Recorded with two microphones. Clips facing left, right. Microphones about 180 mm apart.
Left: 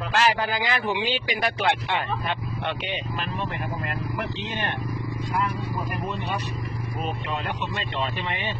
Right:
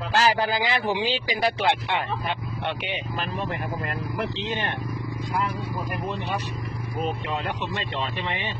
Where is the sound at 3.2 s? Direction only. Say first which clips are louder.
Right 1 dB; 35° right (ahead or behind).